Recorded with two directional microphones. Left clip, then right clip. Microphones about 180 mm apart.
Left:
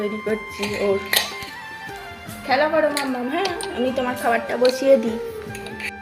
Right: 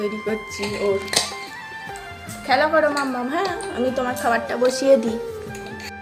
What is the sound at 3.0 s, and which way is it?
Speech, centre (ahead or behind).